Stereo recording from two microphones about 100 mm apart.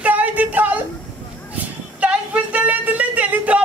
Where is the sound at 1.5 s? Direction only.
15° right (ahead or behind).